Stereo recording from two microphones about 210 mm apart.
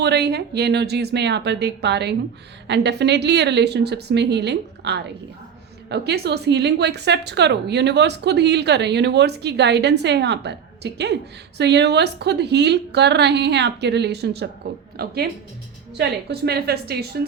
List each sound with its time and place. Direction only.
0.0 s a woman's voice: 50° right (ahead or behind)